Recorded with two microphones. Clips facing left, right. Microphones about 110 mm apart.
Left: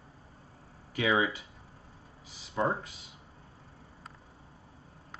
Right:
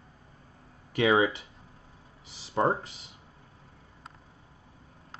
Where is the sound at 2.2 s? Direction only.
80° right.